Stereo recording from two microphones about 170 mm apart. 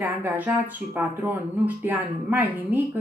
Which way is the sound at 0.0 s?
10° right (ahead or behind).